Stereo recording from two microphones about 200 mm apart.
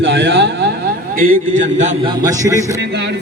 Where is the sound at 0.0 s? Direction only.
65° right (ahead or behind).